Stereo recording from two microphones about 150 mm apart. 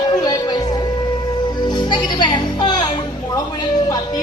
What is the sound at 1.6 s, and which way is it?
Speech, 30° left (ahead or behind).